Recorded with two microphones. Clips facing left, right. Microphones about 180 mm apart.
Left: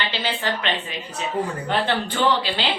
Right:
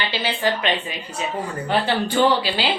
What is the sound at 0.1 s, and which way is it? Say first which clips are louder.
A woman's voice: right 3 dB; 10° right (ahead or behind).